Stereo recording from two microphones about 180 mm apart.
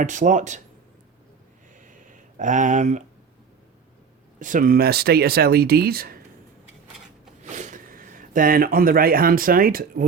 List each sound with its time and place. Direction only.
0.0 s speech: 45° right (ahead or behind)
1.8 s a sound: 45° right (ahead or behind)
4.4 s speech: 45° right (ahead or behind)
7.4 s speech: 40° right (ahead or behind)